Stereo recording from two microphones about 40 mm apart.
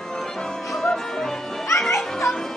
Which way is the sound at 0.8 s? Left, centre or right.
Centre.